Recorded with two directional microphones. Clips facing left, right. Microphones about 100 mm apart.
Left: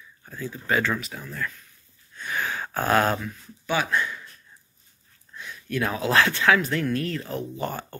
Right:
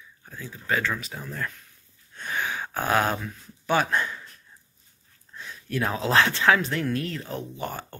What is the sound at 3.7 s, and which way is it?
Speech, 40° right (ahead or behind).